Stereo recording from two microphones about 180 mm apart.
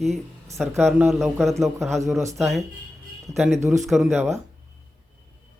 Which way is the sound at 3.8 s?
Centre (ahead or behind).